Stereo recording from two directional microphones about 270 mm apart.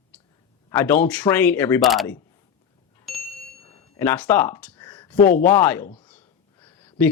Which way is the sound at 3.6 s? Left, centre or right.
Left.